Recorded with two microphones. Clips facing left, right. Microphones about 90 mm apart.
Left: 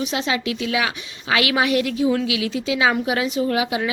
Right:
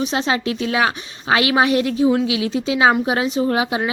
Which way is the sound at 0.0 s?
35° right (ahead or behind).